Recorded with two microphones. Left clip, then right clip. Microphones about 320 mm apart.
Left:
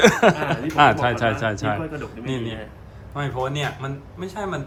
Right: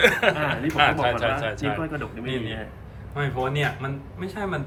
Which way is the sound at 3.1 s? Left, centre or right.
Centre.